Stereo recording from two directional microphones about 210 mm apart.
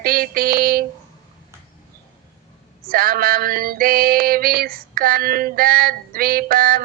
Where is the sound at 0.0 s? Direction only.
45° right (ahead or behind).